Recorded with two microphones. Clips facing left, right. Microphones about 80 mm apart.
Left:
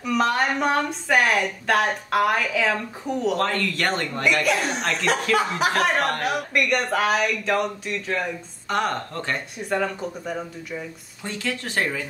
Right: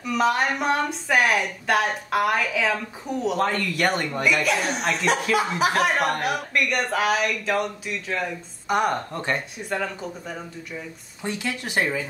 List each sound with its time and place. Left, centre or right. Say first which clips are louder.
0.0 s a woman's voice: even; centre
3.3 s speech: even; centre
6.5 s a woman's voice: left 3 dB; centre
8.6 s speech: right 2 dB; centre
9.7 s a woman's voice: left 4 dB; centre
11.2 s speech: even; centre